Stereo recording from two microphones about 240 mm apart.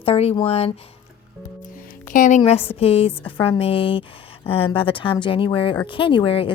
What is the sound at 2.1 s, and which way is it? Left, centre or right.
A woman's voice, left.